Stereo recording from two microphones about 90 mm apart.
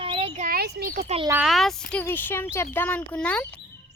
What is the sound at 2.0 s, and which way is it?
Speech, 25° left (ahead or behind).